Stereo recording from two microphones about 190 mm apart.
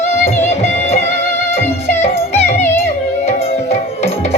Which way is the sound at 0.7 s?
35° left (ahead or behind).